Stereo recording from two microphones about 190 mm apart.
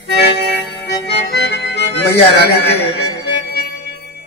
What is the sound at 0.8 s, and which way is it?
A man's voice, 65° left (ahead or behind).